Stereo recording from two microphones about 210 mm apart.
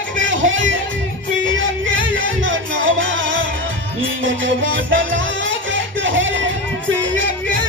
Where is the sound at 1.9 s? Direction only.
65° right (ahead or behind).